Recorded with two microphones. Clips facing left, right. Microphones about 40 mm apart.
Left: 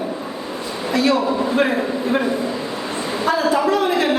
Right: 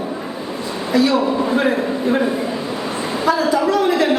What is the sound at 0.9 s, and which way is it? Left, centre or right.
Speech, left.